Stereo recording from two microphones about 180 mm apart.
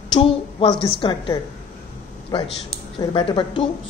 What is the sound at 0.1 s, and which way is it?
A woman's voice, 30° left (ahead or behind).